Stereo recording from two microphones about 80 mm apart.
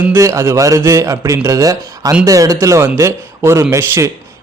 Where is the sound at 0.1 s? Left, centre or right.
Right.